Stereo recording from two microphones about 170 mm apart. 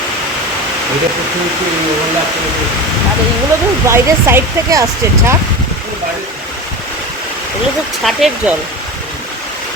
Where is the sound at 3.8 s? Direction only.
15° right (ahead or behind).